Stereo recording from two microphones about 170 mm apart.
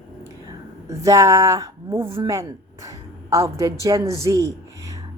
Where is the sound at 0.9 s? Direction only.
20° right (ahead or behind).